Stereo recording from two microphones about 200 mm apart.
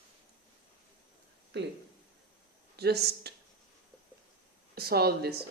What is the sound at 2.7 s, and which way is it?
Speech, 55° right (ahead or behind).